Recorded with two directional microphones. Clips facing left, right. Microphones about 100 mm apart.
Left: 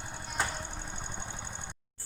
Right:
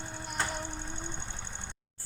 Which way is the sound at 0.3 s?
10° left (ahead or behind).